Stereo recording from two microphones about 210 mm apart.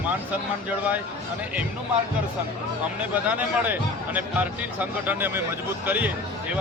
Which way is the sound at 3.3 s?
10° right (ahead or behind).